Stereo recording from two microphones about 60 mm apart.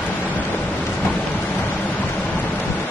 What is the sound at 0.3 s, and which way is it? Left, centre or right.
Vehicle, left.